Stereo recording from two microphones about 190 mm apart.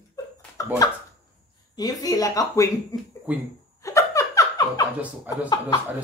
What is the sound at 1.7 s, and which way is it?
Speech, 20° left (ahead or behind).